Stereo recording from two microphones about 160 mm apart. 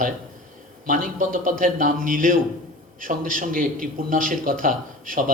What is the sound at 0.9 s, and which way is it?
A man's voice, 55° right (ahead or behind).